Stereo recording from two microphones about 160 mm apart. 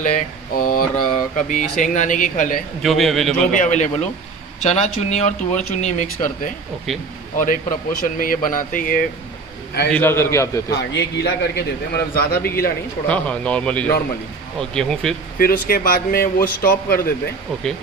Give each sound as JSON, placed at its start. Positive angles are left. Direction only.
{"t": 0.0, "sound": "speech", "side_deg": 55}
{"t": 2.8, "sound": "a man's voice", "side_deg": 0}
{"t": 3.5, "sound": "speech", "side_deg": 50}
{"t": 9.9, "sound": "speech", "side_deg": 15}
{"t": 10.8, "sound": "a man's voice", "side_deg": 90}
{"t": 13.1, "sound": "a man's voice", "side_deg": 5}
{"t": 15.3, "sound": "speech", "side_deg": 60}